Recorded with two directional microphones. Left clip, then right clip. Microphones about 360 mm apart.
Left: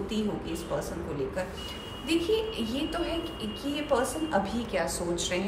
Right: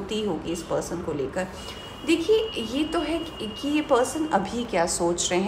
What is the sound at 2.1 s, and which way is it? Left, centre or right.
A woman's voice, centre.